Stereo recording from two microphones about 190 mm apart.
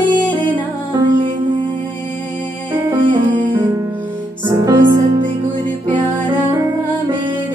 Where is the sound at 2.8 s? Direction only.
25° right (ahead or behind).